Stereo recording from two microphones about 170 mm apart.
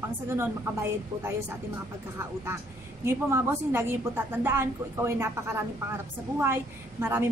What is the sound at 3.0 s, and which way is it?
A woman's voice, 15° right (ahead or behind).